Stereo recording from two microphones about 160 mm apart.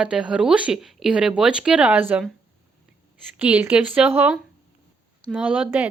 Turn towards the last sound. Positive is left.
turn(degrees=-10)  # may be behind; listen again after turning